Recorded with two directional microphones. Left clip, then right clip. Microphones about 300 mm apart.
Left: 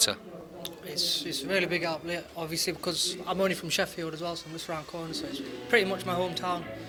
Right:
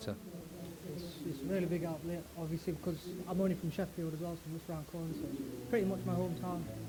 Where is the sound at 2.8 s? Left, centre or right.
Left.